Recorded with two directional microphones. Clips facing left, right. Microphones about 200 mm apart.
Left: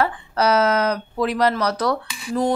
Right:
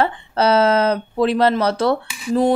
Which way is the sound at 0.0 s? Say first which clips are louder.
Right 2 dB; 30° right (ahead or behind).